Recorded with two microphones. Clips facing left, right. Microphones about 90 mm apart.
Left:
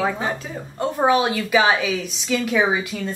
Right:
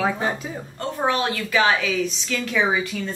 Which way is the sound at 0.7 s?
15° left (ahead or behind).